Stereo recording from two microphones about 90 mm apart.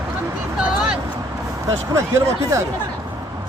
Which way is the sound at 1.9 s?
35° right (ahead or behind).